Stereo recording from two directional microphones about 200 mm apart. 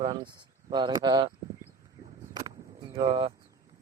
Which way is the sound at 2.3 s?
20° right (ahead or behind).